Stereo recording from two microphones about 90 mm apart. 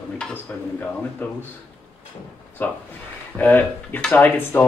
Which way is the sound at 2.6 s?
25° left (ahead or behind).